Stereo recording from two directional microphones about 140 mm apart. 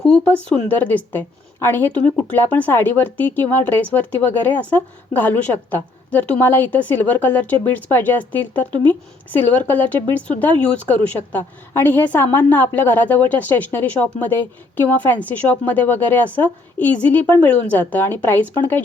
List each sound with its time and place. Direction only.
0.0 s a woman's voice: 5° left (ahead or behind)
5.1 s a woman's voice: 10° left (ahead or behind)